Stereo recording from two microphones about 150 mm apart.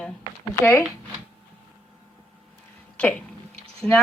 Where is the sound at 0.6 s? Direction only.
15° left (ahead or behind).